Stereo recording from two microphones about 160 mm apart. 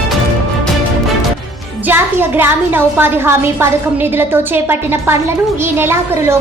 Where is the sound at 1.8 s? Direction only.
15° right (ahead or behind).